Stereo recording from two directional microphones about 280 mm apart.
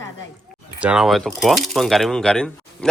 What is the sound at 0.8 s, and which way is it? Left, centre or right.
Speech, centre.